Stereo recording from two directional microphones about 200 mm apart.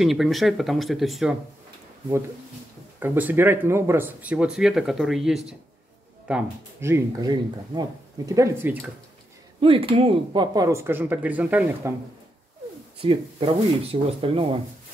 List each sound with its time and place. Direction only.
0.0 s speech: centre (ahead or behind)
3.0 s speech: 10° right (ahead or behind)
9.6 s speech: 25° right (ahead or behind); by 11.9 s 10° right (ahead or behind)
13.0 s speech: 25° right (ahead or behind)